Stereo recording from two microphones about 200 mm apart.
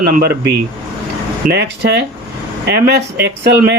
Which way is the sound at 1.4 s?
60° right (ahead or behind).